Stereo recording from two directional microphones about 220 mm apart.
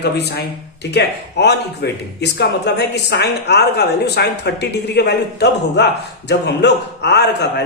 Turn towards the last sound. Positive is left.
turn(degrees=50)  # may be behind; listen again after turning